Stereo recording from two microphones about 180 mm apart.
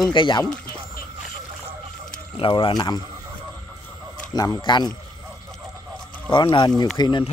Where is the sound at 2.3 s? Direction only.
30° left (ahead or behind).